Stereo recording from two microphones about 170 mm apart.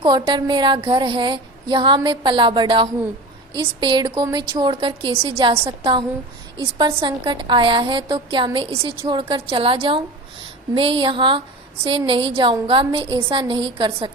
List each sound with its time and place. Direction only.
0.0 s a woman's voice: 25° right (ahead or behind)